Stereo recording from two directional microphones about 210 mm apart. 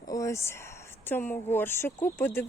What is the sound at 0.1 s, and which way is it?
Speech, 15° left (ahead or behind).